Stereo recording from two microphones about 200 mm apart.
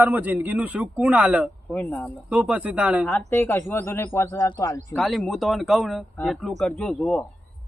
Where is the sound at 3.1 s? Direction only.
10° left (ahead or behind).